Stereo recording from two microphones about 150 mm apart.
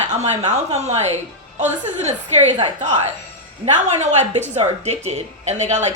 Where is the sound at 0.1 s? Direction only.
50° right (ahead or behind).